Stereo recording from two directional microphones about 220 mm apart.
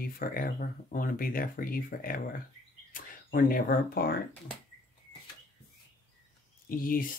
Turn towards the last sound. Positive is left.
turn(degrees=40)  # may be behind; listen again after turning